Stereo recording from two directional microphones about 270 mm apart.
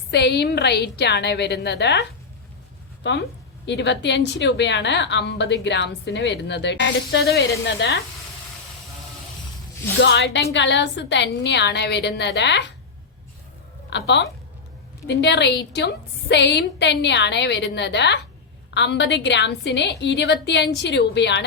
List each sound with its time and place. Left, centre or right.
0.1 s a woman's voice: left
10.0 s a woman's voice: left
13.9 s a woman's voice: left